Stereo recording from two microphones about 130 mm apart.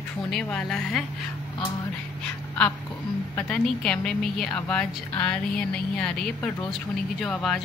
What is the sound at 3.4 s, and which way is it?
A woman's voice, 10° left (ahead or behind).